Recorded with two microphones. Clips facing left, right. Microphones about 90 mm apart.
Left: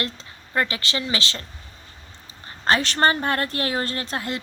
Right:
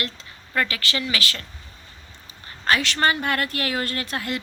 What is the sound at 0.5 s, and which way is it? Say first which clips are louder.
Speech: left 1 dB; 25° left (ahead or behind).